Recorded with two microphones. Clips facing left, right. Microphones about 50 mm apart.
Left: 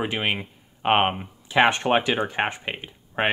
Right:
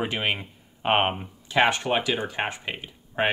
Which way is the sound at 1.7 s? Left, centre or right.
Left.